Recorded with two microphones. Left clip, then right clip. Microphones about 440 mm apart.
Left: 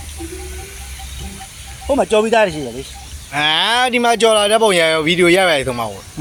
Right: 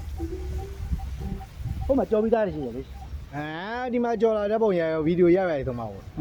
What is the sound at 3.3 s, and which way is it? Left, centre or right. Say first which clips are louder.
Speech: left 18 dB; right.